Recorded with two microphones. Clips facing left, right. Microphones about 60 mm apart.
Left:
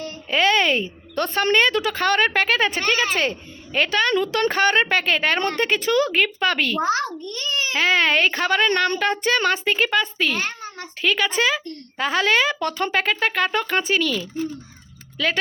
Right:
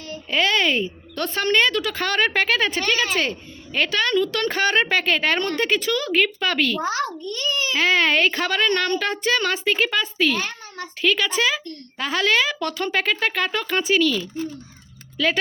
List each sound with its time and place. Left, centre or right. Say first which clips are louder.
0.3 s a woman's voice: left 2 dB; centre
6.8 s a child's voice: left 2 dB; left
7.8 s speech: even; centre
8.6 s speech: even; centre
9.0 s speech: left 2 dB; centre